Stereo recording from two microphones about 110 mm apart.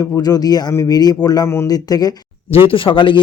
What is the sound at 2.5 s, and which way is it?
Speech, 55° left (ahead or behind).